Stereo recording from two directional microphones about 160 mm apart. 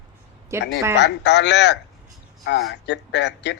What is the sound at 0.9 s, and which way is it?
Speech, 90° left.